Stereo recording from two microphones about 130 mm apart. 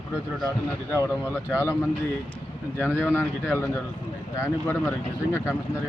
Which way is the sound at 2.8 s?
15° left (ahead or behind).